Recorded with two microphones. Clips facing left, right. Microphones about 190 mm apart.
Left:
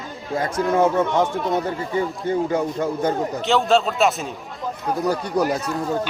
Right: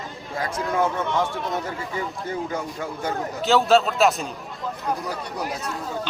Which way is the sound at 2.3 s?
30° left (ahead or behind).